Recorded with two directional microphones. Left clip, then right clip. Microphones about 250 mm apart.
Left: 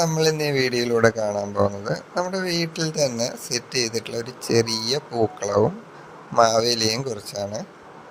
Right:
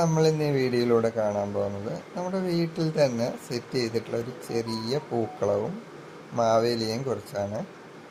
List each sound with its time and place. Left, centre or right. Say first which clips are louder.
0.0 s speech: left 3 dB; left